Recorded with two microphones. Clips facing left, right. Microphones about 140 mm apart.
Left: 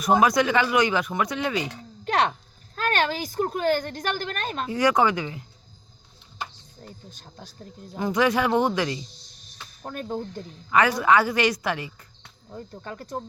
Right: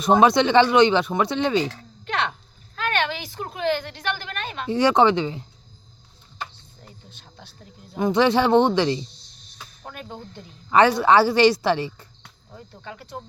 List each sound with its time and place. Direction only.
0.0 s speech: 25° right (ahead or behind)
2.0 s a woman's voice: 40° left (ahead or behind)
4.7 s speech: 25° right (ahead or behind)
7.1 s a woman's voice: 40° left (ahead or behind)
7.9 s speech: 25° right (ahead or behind)
9.8 s speech: 45° left (ahead or behind)
10.7 s speech: 30° right (ahead or behind)
12.5 s a woman's voice: 45° left (ahead or behind)